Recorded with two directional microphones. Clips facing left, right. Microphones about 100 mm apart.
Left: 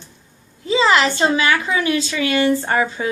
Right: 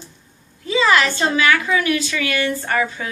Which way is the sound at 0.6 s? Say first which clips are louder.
Left 1 dB; 25° left (ahead or behind).